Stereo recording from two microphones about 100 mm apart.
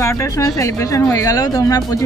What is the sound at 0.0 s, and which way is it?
Speech, 30° left (ahead or behind).